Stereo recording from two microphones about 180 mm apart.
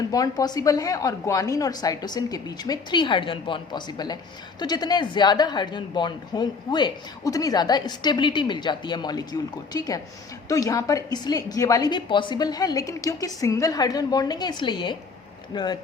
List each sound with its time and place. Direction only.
0.1 s speech: 20° left (ahead or behind)